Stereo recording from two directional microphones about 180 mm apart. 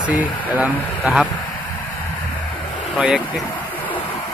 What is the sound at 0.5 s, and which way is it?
Speech, 10° right (ahead or behind).